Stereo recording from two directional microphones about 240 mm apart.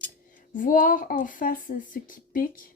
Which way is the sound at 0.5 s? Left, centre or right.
Left.